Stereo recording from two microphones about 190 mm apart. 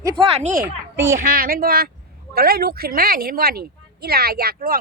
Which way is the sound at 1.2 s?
50° right (ahead or behind).